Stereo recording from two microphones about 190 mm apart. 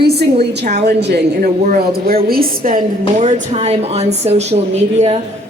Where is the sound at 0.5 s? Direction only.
60° right (ahead or behind).